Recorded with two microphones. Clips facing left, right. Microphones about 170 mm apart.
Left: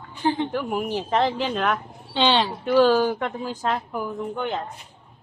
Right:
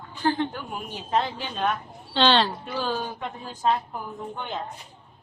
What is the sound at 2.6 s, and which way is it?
A woman's voice, 75° left (ahead or behind).